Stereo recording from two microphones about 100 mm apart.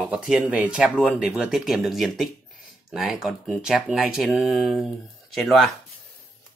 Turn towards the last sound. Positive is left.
turn(degrees=0)  # may be behind; listen again after turning